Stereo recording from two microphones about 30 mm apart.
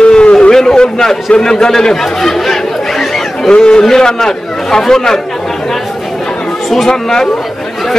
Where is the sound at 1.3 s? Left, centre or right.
Left.